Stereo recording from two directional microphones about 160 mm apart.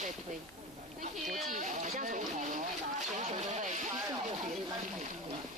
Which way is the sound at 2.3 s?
55° right (ahead or behind).